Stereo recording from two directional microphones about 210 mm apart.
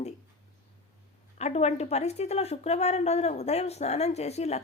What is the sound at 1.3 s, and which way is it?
A woman's voice, 30° left (ahead or behind).